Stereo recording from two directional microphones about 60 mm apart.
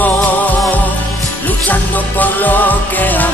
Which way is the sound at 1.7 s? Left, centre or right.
Left.